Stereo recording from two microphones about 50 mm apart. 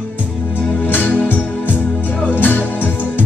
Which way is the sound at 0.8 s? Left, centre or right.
Left.